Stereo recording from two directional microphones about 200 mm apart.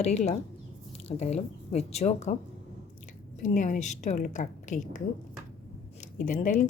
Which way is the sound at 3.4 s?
40° left (ahead or behind).